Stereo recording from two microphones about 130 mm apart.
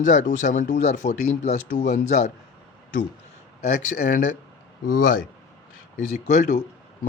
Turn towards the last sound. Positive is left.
turn(degrees=70)  # may be behind; listen again after turning